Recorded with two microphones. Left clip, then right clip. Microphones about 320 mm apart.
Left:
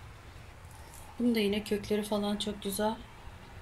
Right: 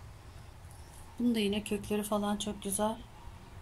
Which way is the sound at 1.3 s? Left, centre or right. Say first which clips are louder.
Left 3 dB; centre.